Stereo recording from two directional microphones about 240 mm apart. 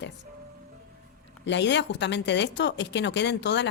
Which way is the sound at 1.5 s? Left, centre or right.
Left.